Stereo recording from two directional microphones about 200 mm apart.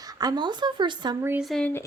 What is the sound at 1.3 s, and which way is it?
Speech, centre (ahead or behind).